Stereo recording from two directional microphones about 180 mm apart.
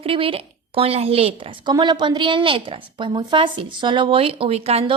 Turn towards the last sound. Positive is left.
turn(degrees=-35)  # may be behind; listen again after turning